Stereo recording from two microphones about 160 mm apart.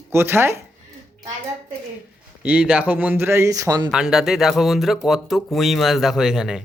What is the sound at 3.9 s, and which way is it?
Speech, 5° right (ahead or behind).